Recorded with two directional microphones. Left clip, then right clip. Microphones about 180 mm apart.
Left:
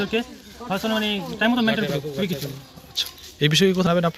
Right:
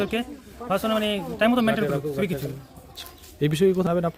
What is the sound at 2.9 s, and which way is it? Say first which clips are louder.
Speech: left 15 dB; centre (ahead or behind).